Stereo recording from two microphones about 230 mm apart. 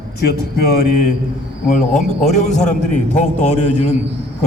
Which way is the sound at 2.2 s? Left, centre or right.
Left.